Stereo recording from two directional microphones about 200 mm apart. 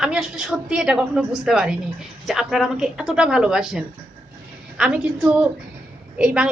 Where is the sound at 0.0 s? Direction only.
5° right (ahead or behind).